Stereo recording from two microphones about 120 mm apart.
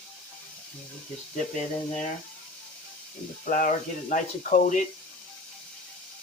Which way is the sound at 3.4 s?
90° left.